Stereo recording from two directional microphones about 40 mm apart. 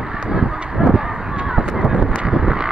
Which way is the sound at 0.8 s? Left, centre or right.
Right.